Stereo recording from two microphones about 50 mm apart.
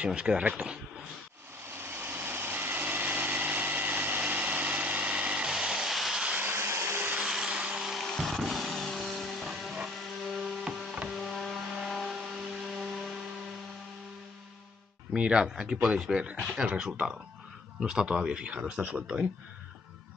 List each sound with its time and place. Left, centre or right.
0.0 s speech: right
1.7 s vehicle: right
4.7 s light engine: right
5.6 s vehicle: centre
6.1 s vehicle: right
6.4 s vacuum cleaner: right
7.2 s vacuum cleaner: centre
7.5 s blender: centre
8.0 s a sound: centre
8.5 s vehicle: centre
9.9 s a sound: centre
11.1 s printer: centre
11.7 s a sound: centre
15.1 s speech: centre